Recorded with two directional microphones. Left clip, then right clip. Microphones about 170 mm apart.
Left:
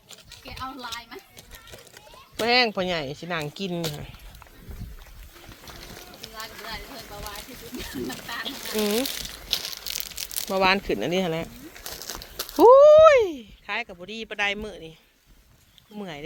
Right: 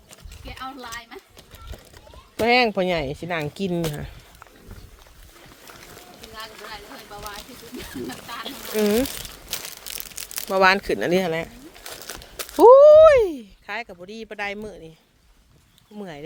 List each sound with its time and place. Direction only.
2.0 s speech: 45° right (ahead or behind)
6.2 s boat: 45° right (ahead or behind)
8.7 s crumpling: 40° right (ahead or behind); by 11.4 s 55° right (ahead or behind)
11.8 s a sound: 30° right (ahead or behind)
16.0 s speech: 25° right (ahead or behind)